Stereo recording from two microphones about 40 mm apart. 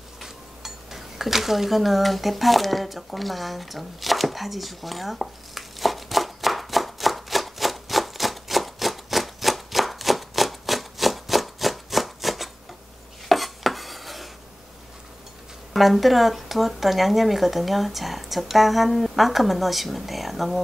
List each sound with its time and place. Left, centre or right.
0.2 s dishes: centre
15.7 s speech: centre